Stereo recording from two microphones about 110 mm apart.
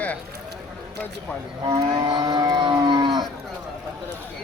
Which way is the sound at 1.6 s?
40° right (ahead or behind).